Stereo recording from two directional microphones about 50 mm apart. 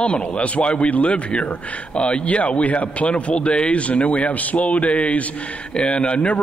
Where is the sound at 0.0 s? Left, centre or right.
Left.